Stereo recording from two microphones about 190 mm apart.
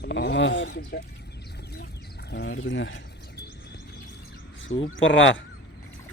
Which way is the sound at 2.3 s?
60° left (ahead or behind).